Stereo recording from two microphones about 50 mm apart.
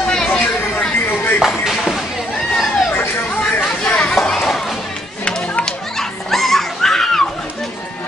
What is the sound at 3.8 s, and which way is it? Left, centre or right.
Chatter, left.